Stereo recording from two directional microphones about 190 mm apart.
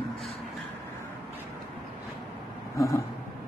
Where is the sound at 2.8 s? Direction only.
15° left (ahead or behind).